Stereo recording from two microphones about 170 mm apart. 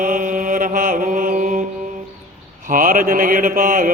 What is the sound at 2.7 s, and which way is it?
Mantra, 55° right (ahead or behind).